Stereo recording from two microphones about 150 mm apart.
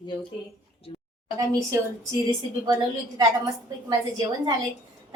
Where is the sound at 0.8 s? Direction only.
40° left (ahead or behind).